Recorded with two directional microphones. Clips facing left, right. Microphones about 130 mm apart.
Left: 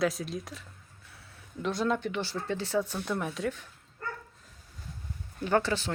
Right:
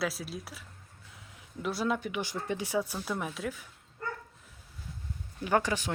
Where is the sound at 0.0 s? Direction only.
5° right (ahead or behind).